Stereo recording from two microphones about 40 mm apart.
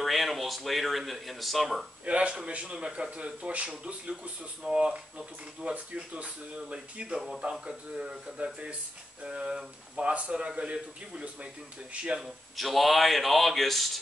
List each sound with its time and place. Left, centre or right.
0.0 s speech: centre
2.0 s speech: right
4.6 s speech: centre
5.6 s speech: right
10.0 s speech: right
12.2 s speech: centre